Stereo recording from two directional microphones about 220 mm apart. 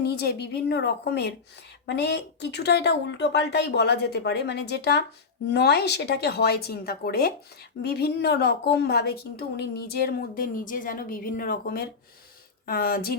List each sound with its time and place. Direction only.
0.0 s a woman's voice: 45° left (ahead or behind)